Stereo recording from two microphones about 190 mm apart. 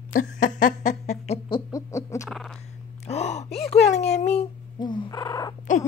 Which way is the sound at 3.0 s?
35° left (ahead or behind).